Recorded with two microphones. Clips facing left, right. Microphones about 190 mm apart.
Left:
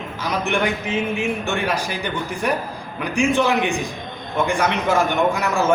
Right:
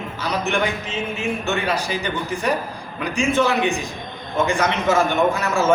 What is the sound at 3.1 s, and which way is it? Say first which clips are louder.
A man's voice: left 1 dB; 15° left (ahead or behind).